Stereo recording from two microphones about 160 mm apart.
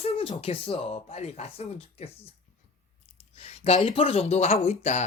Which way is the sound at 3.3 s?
40° left (ahead or behind).